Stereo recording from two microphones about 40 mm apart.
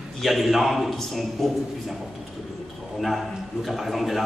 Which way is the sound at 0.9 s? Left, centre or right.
Centre.